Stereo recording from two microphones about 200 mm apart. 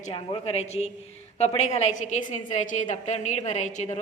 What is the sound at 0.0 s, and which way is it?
A woman's voice, 30° left (ahead or behind).